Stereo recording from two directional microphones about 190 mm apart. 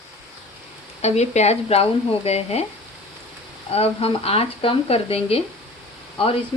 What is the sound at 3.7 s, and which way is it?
Speech, 30° left (ahead or behind).